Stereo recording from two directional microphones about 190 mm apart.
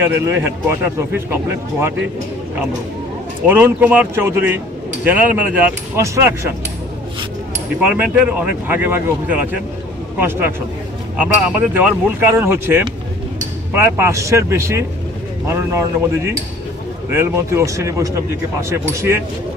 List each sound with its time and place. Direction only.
0.2 s speech: 15° right (ahead or behind)
3.4 s speech: 10° right (ahead or behind)
7.8 s speech: 5° right (ahead or behind)